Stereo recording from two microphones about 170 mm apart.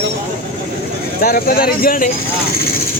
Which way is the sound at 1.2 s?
60° left (ahead or behind).